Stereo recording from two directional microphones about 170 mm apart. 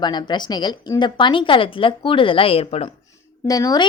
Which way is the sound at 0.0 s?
25° left (ahead or behind).